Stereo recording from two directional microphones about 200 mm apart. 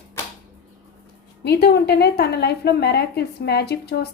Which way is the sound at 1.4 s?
55° left (ahead or behind).